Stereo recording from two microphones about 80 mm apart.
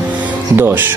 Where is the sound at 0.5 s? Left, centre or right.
Right.